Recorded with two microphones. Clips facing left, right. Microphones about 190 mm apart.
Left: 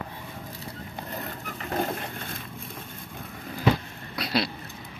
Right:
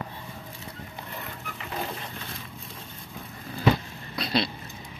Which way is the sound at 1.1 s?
40° left (ahead or behind).